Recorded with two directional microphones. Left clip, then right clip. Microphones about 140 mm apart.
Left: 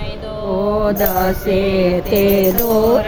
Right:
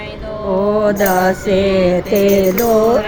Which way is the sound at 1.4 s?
10° left (ahead or behind).